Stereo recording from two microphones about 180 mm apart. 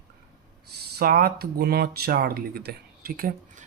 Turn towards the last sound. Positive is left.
turn(degrees=-50)  # may be behind; listen again after turning